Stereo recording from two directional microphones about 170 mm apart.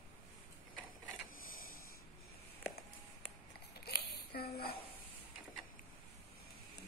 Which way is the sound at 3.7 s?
70° left (ahead or behind).